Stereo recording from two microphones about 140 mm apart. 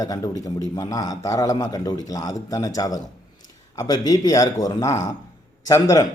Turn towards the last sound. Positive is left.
turn(degrees=25)  # may be behind; listen again after turning